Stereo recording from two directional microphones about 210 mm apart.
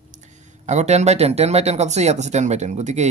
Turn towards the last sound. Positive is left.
turn(degrees=-35)  # may be behind; listen again after turning